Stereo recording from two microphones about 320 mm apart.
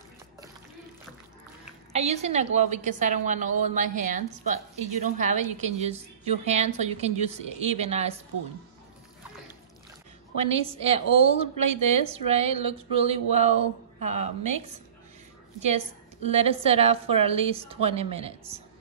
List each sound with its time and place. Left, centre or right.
1.9 s a woman's voice: centre
10.3 s a woman's voice: centre
15.6 s a woman's voice: centre